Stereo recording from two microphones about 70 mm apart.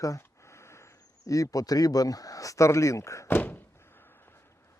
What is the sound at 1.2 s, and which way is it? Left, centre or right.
Speech, left.